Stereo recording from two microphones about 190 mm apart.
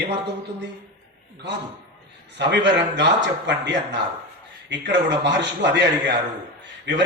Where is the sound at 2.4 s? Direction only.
65° right (ahead or behind).